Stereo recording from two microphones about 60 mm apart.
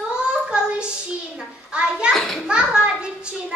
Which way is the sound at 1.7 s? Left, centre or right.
Centre.